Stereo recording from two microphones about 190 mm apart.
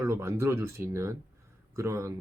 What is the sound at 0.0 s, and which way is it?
Speech, 15° right (ahead or behind).